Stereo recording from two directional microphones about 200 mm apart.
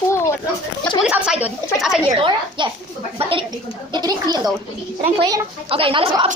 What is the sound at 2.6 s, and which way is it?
Speech, 25° right (ahead or behind).